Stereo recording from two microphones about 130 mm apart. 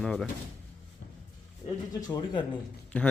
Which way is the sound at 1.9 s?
30° left (ahead or behind).